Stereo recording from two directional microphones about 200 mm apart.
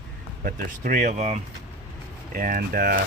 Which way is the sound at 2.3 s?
45° right (ahead or behind).